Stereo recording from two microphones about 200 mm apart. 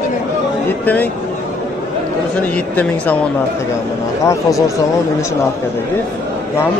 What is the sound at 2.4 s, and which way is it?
Speech, 10° left (ahead or behind).